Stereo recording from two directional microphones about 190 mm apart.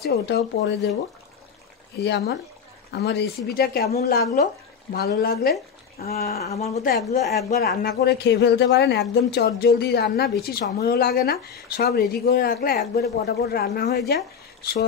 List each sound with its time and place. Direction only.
0.0 s speech: 60° left (ahead or behind)
2.0 s speech: 60° left (ahead or behind)
6.5 s speech: 35° left (ahead or behind)
7.5 s speech: 55° left (ahead or behind)